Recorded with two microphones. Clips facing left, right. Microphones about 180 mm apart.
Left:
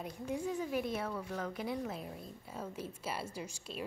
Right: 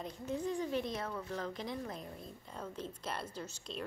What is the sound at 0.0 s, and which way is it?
A woman's voice, 10° left (ahead or behind).